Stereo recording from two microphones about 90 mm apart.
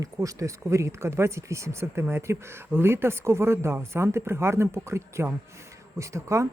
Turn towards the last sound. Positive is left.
turn(degrees=-35)  # may be behind; listen again after turning